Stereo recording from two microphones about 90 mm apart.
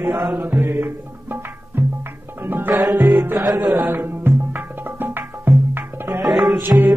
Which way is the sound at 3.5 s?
45° right (ahead or behind).